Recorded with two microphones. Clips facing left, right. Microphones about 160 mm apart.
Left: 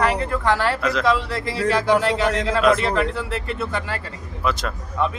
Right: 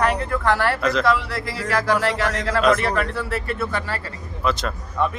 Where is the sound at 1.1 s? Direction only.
20° left (ahead or behind).